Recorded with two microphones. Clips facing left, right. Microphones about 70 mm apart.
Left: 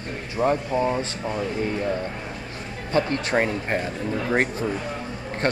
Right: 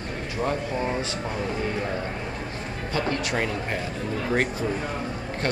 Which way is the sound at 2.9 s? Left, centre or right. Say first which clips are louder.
Left 4 dB; left.